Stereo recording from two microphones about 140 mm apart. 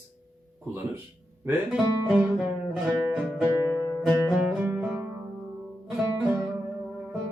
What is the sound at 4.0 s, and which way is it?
Music, centre (ahead or behind).